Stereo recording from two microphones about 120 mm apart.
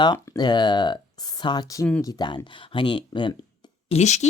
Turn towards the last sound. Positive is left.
turn(degrees=70)  # may be behind; listen again after turning